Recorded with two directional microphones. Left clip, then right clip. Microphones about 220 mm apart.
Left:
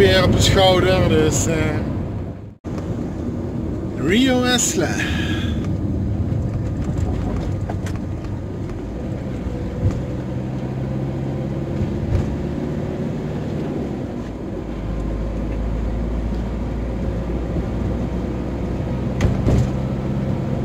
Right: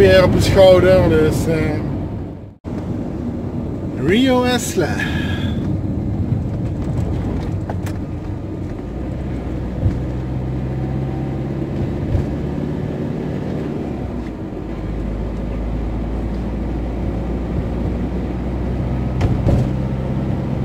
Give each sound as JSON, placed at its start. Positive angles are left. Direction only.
{"t": 0.0, "sound": "speech", "side_deg": -25}
{"t": 4.0, "sound": "speech", "side_deg": -20}